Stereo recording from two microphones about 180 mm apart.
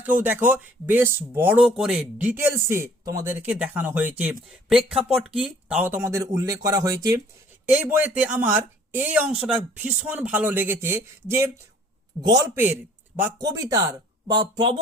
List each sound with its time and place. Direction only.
0.0 s speech: 10° right (ahead or behind)